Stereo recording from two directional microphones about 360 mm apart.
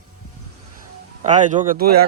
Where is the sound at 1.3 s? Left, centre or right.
Right.